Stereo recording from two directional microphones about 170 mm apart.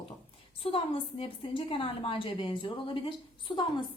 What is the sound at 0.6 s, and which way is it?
A woman's voice, 30° left (ahead or behind).